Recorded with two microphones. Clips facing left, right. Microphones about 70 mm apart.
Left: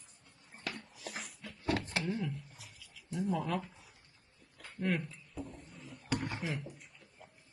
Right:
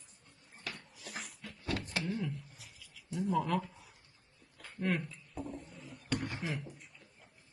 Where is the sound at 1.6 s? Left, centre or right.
Left.